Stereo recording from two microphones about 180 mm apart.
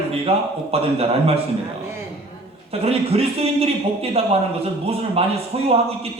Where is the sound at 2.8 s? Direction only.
35° right (ahead or behind).